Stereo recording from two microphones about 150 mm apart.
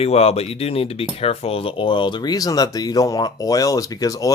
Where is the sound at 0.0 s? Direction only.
40° left (ahead or behind).